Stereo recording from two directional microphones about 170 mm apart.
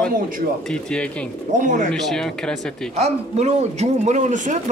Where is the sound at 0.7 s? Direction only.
5° left (ahead or behind).